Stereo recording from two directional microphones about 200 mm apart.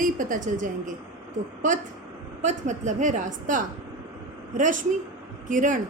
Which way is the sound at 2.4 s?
40° right (ahead or behind).